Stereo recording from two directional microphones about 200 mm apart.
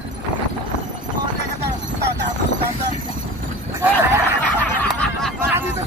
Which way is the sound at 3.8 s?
10° right (ahead or behind).